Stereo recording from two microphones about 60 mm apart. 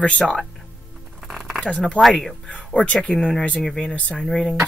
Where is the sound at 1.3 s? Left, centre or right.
Centre.